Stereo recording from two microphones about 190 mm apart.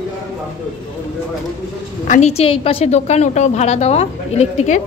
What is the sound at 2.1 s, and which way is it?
A woman's voice, 35° left (ahead or behind).